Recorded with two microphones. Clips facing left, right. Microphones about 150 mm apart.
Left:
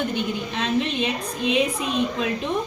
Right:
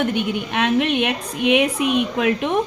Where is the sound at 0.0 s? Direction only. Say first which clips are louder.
Right 4 dB; 65° right (ahead or behind).